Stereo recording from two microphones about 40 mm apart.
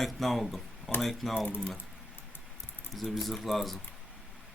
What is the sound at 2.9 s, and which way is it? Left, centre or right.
Speech, centre.